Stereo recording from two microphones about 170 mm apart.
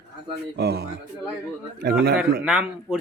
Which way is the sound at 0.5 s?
70° right (ahead or behind).